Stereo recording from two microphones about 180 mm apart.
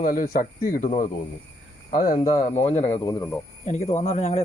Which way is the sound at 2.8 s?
35° left (ahead or behind).